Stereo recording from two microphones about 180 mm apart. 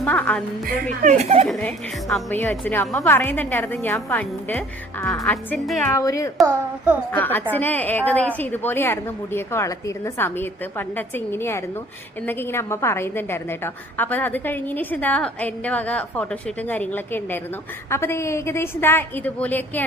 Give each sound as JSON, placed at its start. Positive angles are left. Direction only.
{"t": 0.0, "sound": "a woman's voice", "side_deg": 10}
{"t": 1.0, "sound": "speech", "side_deg": -35}
{"t": 1.5, "sound": "a woman's voice", "side_deg": 0}
{"t": 5.9, "sound": "a woman's voice", "side_deg": 15}